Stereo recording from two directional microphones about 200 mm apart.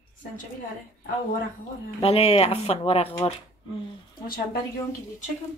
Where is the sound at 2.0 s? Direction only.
30° left (ahead or behind).